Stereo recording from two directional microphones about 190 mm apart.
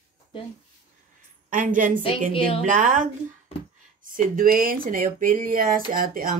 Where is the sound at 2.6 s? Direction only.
40° right (ahead or behind).